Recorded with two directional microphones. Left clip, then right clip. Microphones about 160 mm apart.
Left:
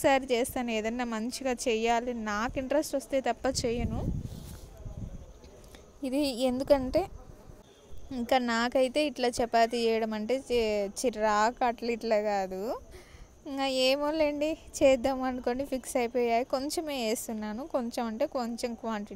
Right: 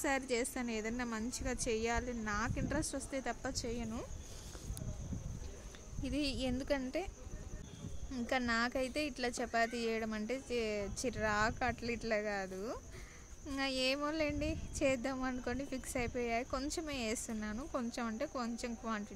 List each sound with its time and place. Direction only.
0.0 s speech: 40° left (ahead or behind)
6.0 s speech: 30° left (ahead or behind)
8.3 s speech: 35° left (ahead or behind)